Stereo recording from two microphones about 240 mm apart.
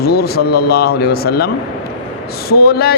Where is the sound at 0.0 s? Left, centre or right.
Left.